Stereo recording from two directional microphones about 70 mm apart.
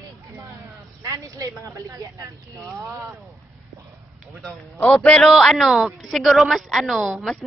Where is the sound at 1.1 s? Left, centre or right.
Right.